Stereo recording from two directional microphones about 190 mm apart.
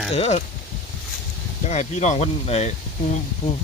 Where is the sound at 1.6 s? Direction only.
35° left (ahead or behind).